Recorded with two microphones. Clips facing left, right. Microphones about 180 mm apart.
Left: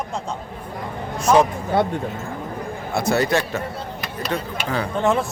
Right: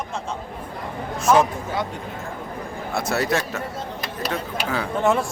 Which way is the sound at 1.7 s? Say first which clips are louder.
Left 8 dB; 60° left (ahead or behind).